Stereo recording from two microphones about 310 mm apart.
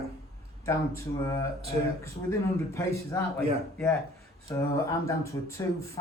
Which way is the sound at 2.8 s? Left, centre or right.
Centre.